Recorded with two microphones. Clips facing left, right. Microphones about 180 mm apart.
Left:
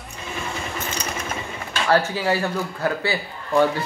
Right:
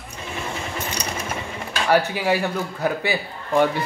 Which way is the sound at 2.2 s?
15° right (ahead or behind).